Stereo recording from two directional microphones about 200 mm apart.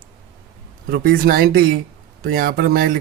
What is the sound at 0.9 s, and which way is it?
Speech, 50° right (ahead or behind).